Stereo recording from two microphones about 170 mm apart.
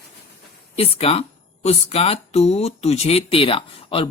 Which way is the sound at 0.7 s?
35° left (ahead or behind).